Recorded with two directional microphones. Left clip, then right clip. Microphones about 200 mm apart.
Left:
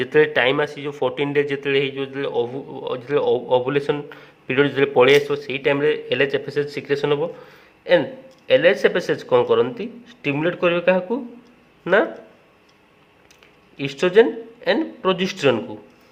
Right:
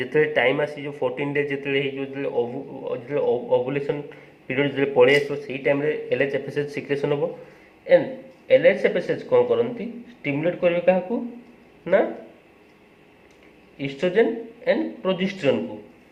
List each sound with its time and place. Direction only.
0.0 s a man's voice: 45° left (ahead or behind)
8.4 s a man's voice: 50° left (ahead or behind)
13.7 s a man's voice: 50° left (ahead or behind)